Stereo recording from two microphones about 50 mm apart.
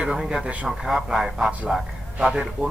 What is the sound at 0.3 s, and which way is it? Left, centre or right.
A man's voice, centre.